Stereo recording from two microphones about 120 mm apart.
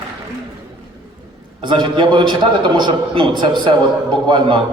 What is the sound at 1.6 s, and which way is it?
A man's voice, 40° right (ahead or behind).